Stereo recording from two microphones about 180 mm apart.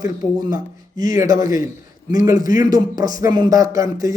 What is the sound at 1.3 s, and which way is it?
A man's voice, 50° left (ahead or behind).